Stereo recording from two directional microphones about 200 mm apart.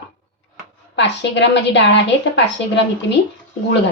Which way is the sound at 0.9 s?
60° left (ahead or behind).